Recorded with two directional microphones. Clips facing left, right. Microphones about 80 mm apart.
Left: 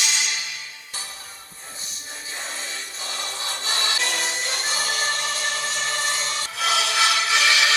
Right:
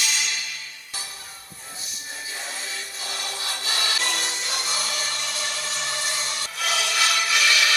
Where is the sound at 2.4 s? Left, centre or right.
Left.